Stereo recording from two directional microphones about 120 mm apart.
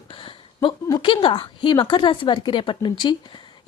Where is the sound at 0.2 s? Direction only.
45° left (ahead or behind).